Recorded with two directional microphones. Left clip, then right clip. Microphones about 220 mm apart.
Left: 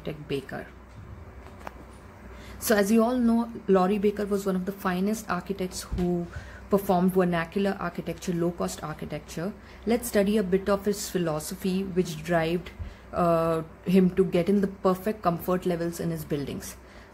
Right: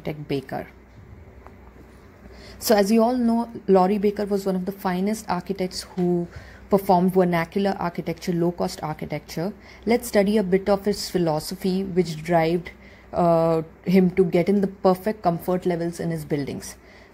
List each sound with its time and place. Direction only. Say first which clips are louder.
0.0 s a woman's voice: right 4 dB; 25° right (ahead or behind)
2.6 s a woman's voice: right 5 dB; 20° right (ahead or behind)
6.9 s a woman's voice: right 6 dB; 20° right (ahead or behind)